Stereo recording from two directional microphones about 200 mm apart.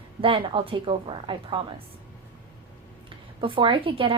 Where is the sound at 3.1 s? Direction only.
25° right (ahead or behind).